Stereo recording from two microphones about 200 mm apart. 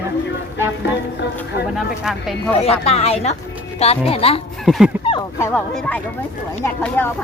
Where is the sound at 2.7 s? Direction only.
30° left (ahead or behind).